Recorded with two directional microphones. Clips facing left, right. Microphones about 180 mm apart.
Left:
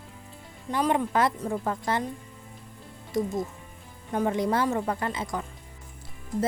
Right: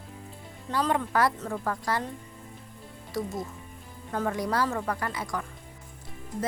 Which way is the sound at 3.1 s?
20° left (ahead or behind).